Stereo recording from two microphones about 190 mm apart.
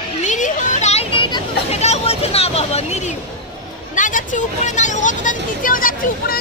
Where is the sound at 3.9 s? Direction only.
40° left (ahead or behind).